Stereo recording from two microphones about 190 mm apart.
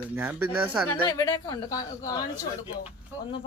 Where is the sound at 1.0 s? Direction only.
20° left (ahead or behind).